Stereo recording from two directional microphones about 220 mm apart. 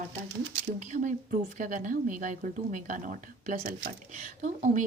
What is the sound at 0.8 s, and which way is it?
A woman's voice, 35° right (ahead or behind).